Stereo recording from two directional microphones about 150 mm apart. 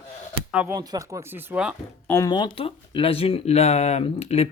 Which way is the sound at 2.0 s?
20° left (ahead or behind).